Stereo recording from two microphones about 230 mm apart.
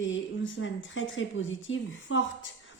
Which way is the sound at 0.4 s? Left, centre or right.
Left.